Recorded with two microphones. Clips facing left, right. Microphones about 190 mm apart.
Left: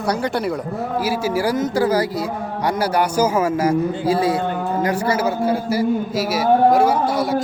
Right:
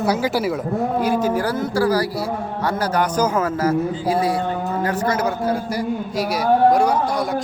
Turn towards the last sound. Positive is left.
turn(degrees=5)  # may be behind; listen again after turning